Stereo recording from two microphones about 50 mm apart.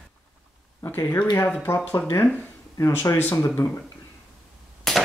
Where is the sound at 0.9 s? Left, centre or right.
Left.